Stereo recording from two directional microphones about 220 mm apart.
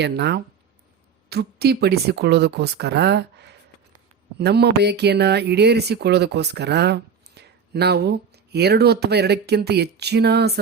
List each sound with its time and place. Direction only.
0.0 s speech: 50° right (ahead or behind)